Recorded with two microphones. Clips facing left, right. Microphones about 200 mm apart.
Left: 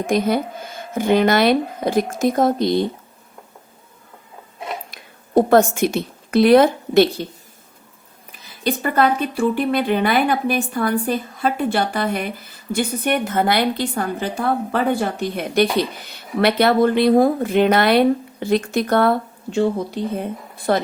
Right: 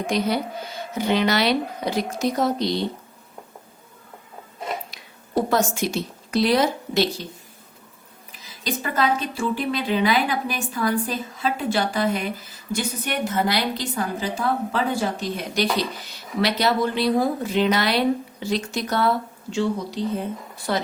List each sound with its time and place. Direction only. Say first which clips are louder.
0.1 s speech: left 5 dB; 50° left (ahead or behind)
4.9 s a woman's voice: left 2 dB; 55° left (ahead or behind)
8.4 s speech: left 6 dB; 55° left (ahead or behind)